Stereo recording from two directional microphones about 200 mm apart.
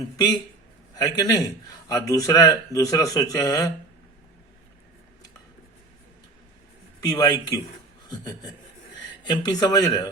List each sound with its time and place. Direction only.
0.9 s speech: 20° left (ahead or behind)
7.0 s speech: 20° left (ahead or behind)
9.2 s speech: 20° left (ahead or behind)